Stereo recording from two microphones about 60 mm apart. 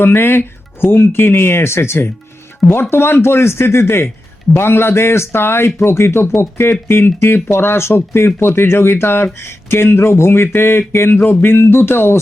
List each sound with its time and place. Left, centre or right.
0.0 s speech: left